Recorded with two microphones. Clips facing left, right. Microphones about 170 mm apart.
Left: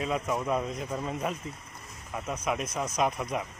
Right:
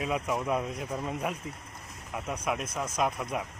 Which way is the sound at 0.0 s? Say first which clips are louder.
Left 1 dB; 5° right (ahead or behind).